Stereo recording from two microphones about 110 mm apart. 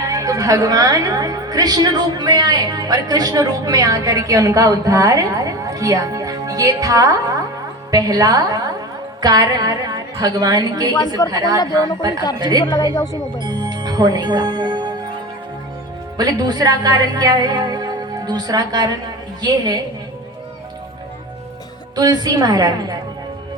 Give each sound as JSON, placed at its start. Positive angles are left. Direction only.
{"t": 0.1, "sound": "a woman's voice", "side_deg": -30}
{"t": 12.7, "sound": "a woman's voice", "side_deg": 40}
{"t": 13.4, "sound": "music", "side_deg": -40}
{"t": 16.1, "sound": "a woman's voice", "side_deg": -40}
{"t": 21.9, "sound": "a woman's voice", "side_deg": -40}